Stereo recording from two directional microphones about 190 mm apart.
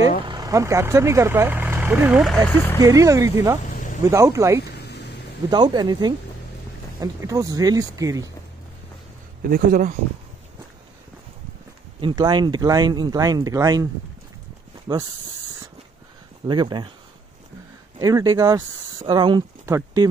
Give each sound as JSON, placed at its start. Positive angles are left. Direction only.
{"t": 0.3, "sound": "speech", "side_deg": -20}
{"t": 2.8, "sound": "speech", "side_deg": -15}
{"t": 3.6, "sound": "vehicle", "side_deg": 45}
{"t": 4.0, "sound": "speech", "side_deg": -15}
{"t": 4.7, "sound": "a sound", "side_deg": 60}
{"t": 5.5, "sound": "speech", "side_deg": -20}
{"t": 9.5, "sound": "speech", "side_deg": -45}
{"t": 12.0, "sound": "speech", "side_deg": -25}
{"t": 16.4, "sound": "speech", "side_deg": -25}
{"t": 17.9, "sound": "speech", "side_deg": -20}